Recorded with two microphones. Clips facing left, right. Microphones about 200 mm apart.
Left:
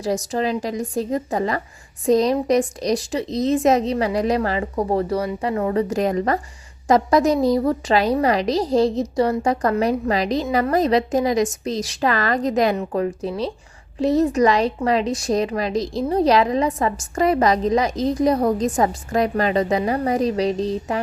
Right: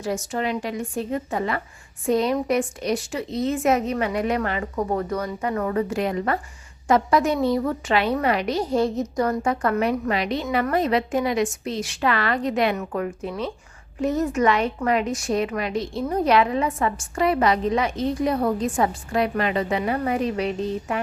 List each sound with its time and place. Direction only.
0.0 s a woman's voice: 35° left (ahead or behind)
5.9 s a woman's voice: 40° left (ahead or behind)